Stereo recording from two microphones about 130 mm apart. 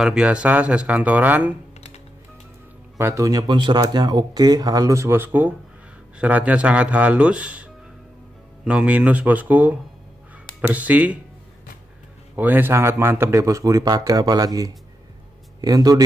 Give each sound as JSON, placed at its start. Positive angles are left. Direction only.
{"t": 0.0, "sound": "speech", "side_deg": -5}
{"t": 3.0, "sound": "a man's voice", "side_deg": -25}
{"t": 8.6, "sound": "speech", "side_deg": -10}
{"t": 12.4, "sound": "a man's voice", "side_deg": -15}